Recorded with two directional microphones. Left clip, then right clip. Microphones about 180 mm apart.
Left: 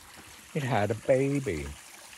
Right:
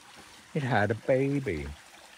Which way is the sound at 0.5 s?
30° right (ahead or behind).